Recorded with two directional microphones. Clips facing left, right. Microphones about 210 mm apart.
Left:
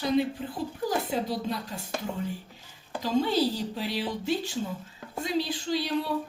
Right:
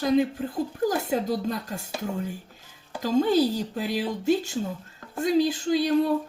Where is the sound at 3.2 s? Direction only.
45° right (ahead or behind).